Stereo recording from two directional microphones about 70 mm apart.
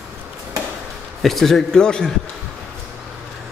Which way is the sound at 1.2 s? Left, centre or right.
Centre.